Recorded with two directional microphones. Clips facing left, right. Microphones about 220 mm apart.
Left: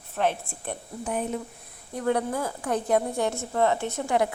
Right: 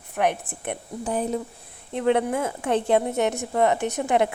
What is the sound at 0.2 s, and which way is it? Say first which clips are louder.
Speech: right 2 dB; 20° right (ahead or behind).